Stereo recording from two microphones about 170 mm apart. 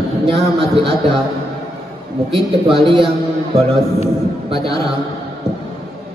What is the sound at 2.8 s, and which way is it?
Speech, 30° right (ahead or behind).